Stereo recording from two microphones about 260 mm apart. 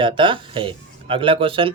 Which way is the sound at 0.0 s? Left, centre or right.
Centre.